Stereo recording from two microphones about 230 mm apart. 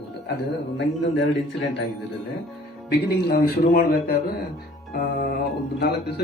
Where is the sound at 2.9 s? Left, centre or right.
Left.